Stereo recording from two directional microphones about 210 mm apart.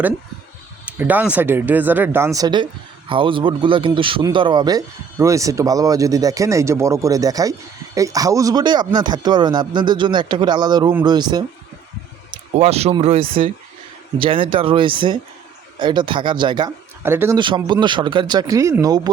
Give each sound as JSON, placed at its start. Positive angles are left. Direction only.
{"t": 0.9, "sound": "speech", "side_deg": -10}
{"t": 12.5, "sound": "speech", "side_deg": -30}
{"t": 17.0, "sound": "a man's voice", "side_deg": -10}
{"t": 17.3, "sound": "speech", "side_deg": -20}